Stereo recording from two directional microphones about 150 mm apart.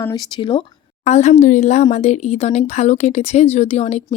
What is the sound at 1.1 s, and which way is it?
Speech, 50° left (ahead or behind).